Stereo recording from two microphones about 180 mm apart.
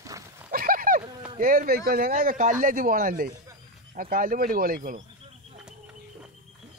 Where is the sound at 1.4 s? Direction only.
50° right (ahead or behind).